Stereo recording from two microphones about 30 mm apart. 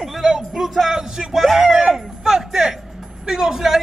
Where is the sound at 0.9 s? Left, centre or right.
Centre.